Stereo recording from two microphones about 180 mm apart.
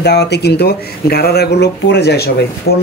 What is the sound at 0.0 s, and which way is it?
A man's voice, 70° left (ahead or behind).